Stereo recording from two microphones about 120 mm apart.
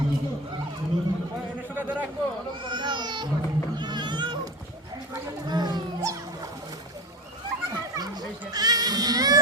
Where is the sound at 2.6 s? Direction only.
40° right (ahead or behind).